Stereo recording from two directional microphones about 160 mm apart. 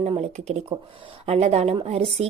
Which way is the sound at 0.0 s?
45° right (ahead or behind).